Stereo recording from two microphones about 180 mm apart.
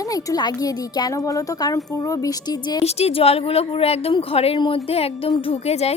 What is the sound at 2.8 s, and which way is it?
A woman's voice, 35° left (ahead or behind).